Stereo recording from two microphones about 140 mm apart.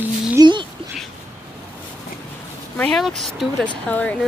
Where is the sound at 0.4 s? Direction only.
35° right (ahead or behind).